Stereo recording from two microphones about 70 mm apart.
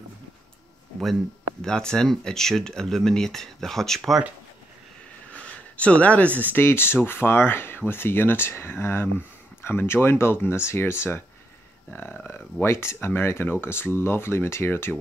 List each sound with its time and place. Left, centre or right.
1.6 s speech: centre
5.3 s a sound: centre
6.5 s speech: left